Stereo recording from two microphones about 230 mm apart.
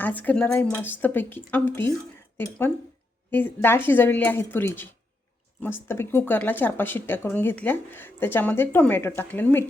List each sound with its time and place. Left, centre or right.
0.0 s a woman's voice: centre